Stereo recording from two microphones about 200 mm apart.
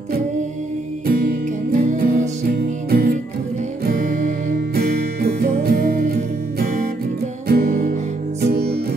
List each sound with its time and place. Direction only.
1.0 s music: 45° right (ahead or behind)
7.4 s music: 45° right (ahead or behind)